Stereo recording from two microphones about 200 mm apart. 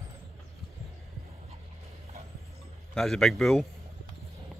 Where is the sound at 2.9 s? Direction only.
Centre (ahead or behind).